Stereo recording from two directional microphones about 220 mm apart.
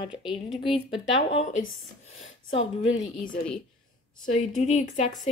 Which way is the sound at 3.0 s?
40° left (ahead or behind).